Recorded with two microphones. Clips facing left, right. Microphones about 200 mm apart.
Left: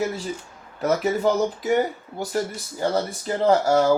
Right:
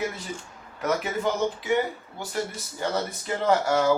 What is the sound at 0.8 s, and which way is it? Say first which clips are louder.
Speech: left 5 dB; 35° left (ahead or behind).